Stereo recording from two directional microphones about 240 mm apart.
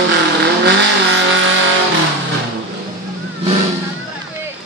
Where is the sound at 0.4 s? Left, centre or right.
Right.